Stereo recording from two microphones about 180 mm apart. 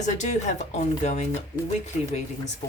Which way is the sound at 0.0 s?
40° left (ahead or behind).